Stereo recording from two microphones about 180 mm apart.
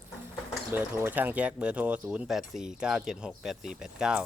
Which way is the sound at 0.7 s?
10° right (ahead or behind).